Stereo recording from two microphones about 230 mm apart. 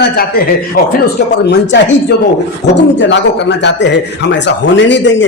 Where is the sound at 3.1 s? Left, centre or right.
Left.